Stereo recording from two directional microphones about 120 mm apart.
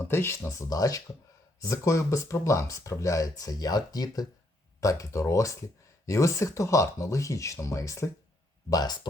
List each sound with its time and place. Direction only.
0.0 s speech: 20° left (ahead or behind)